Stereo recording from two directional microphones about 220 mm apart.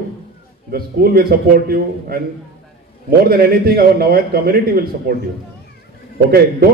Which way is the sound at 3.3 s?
45° right (ahead or behind).